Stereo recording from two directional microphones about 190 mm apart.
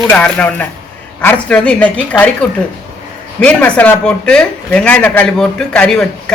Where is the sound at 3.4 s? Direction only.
5° left (ahead or behind).